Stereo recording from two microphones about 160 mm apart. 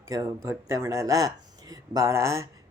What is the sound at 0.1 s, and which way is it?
Speech, 20° right (ahead or behind).